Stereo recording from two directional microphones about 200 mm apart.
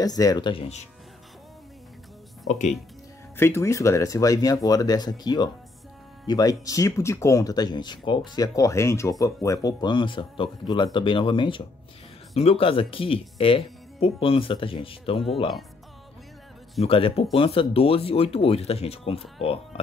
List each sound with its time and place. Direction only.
0.0 s speech: 20° left (ahead or behind)
3.3 s speech: 10° left (ahead or behind)
16.8 s speech: 30° left (ahead or behind)